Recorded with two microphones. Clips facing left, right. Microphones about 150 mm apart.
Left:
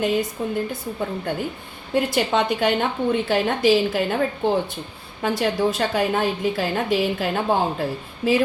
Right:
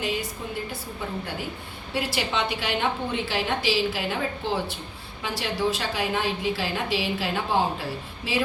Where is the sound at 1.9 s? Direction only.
50° left (ahead or behind).